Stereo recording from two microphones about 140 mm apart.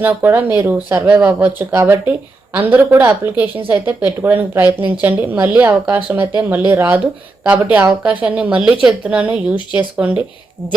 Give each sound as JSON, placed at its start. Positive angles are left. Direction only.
{"t": 0.0, "sound": "speech", "side_deg": -15}